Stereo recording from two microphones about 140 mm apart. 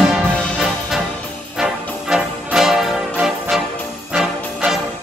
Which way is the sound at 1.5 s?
5° right (ahead or behind).